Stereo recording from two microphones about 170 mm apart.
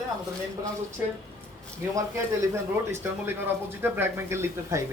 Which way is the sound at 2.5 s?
15° right (ahead or behind).